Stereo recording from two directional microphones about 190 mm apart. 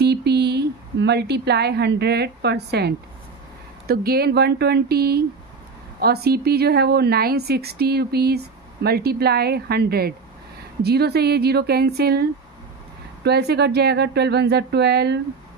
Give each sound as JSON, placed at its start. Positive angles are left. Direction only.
{"t": 0.0, "sound": "a woman's voice", "side_deg": -60}